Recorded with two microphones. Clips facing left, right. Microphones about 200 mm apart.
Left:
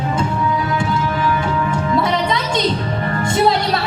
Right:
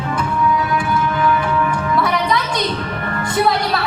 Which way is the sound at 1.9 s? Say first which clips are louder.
Even; 25° left (ahead or behind).